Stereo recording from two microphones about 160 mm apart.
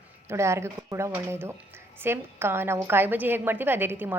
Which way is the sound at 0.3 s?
15° right (ahead or behind).